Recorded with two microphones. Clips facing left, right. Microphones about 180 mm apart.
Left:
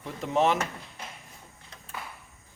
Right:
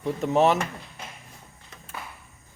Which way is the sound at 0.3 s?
40° right (ahead or behind).